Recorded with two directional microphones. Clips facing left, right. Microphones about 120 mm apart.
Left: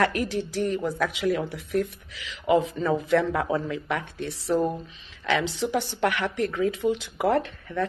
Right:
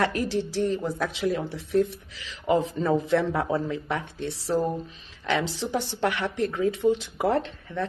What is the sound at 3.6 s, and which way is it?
A woman's voice, 25° right (ahead or behind).